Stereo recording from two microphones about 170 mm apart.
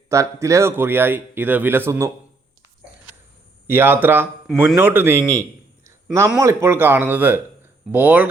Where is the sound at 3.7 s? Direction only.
15° right (ahead or behind).